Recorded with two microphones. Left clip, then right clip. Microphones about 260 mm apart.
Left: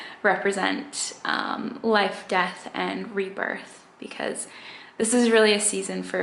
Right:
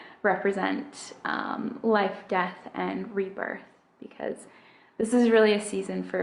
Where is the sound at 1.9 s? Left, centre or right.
Centre.